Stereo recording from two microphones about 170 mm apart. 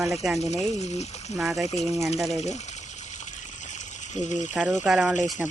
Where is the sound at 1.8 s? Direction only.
20° right (ahead or behind).